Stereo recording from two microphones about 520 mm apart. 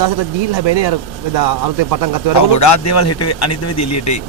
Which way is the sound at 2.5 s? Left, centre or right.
Left.